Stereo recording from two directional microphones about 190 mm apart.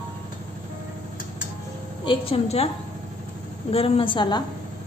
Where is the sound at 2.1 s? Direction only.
30° left (ahead or behind).